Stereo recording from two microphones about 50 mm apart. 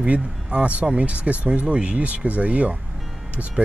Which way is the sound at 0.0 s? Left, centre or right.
Right.